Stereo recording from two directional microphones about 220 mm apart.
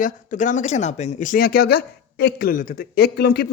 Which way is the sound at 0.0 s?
35° left (ahead or behind).